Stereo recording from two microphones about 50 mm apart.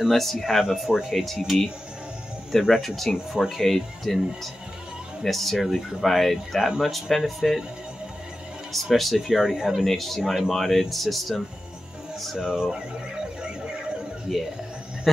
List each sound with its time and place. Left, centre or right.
0.1 s speech: centre
6.0 s speech: centre
8.7 s speech: centre
9.8 s speech: centre
12.4 s a sound: centre
14.3 s speech: centre